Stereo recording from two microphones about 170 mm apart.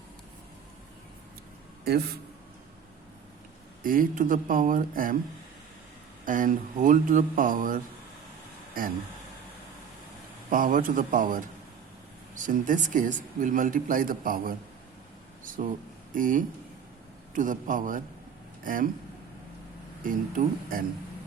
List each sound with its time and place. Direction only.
3.8 s speech: 55° right (ahead or behind)
6.2 s speech: 50° right (ahead or behind)
10.5 s speech: 55° right (ahead or behind)
20.1 s speech: 50° right (ahead or behind)